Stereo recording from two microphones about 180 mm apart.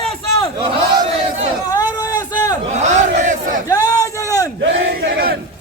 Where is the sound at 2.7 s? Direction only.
40° right (ahead or behind).